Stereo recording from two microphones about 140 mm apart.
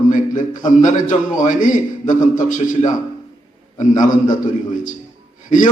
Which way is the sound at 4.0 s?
65° left (ahead or behind).